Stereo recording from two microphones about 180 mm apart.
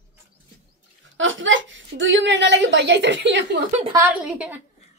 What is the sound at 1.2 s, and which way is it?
A woman's voice, 90° right.